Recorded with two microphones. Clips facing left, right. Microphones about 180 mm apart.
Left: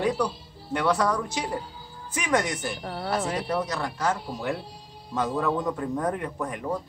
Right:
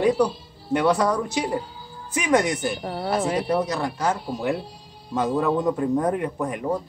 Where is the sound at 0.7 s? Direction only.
15° right (ahead or behind).